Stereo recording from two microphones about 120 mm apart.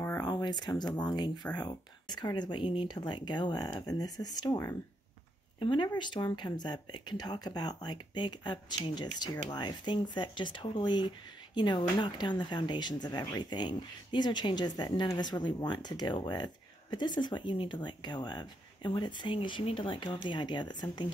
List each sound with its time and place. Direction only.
0.2 s speech: 40° left (ahead or behind)
5.6 s speech: 40° left (ahead or behind)